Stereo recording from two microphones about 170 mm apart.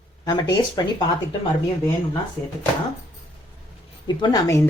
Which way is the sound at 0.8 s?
25° left (ahead or behind).